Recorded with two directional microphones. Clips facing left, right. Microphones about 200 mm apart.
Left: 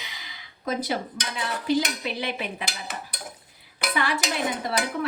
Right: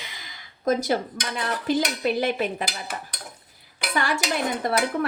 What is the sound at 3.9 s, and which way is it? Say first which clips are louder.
Speech: right 1 dB; 45° right (ahead or behind).